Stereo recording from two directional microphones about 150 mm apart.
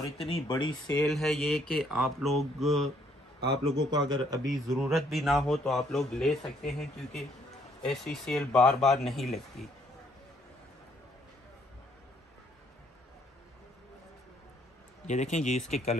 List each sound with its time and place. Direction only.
0.2 s speech: 35° left (ahead or behind)
1.0 s a man's voice: centre (ahead or behind)
3.4 s a man's voice: 30° right (ahead or behind)
4.5 s a man's voice: centre (ahead or behind)
15.0 s speech: 50° left (ahead or behind)